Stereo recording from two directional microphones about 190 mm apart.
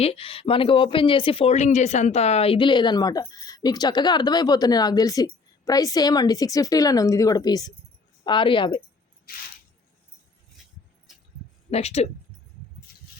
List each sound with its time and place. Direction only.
0.0 s speech: 30° left (ahead or behind)
11.7 s speech: 35° left (ahead or behind)